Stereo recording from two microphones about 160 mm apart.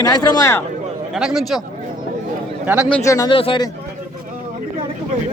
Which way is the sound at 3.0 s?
20° left (ahead or behind).